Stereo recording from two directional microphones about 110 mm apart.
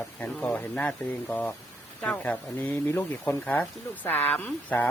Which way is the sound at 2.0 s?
10° left (ahead or behind).